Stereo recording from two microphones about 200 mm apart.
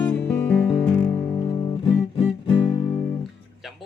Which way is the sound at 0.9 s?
25° left (ahead or behind).